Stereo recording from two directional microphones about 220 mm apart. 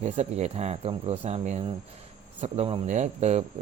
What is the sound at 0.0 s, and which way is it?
Speech, 30° right (ahead or behind).